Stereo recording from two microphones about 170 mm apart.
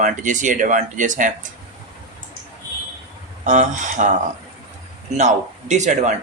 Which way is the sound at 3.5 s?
45° right (ahead or behind).